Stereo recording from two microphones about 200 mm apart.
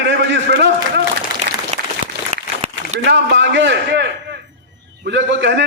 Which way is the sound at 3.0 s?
60° right (ahead or behind).